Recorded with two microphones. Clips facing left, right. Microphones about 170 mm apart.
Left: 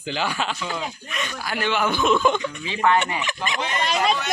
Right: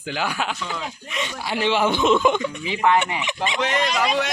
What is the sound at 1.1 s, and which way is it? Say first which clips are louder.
Speech: right 4 dB; 25° right (ahead or behind).